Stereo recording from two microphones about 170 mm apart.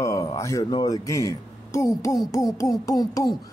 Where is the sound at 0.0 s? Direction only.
20° left (ahead or behind).